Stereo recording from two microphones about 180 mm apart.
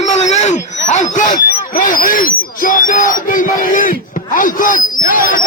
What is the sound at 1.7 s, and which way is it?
Speech, 50° left (ahead or behind).